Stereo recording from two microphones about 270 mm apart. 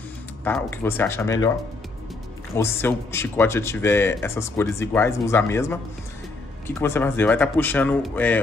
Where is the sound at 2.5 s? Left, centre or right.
Centre.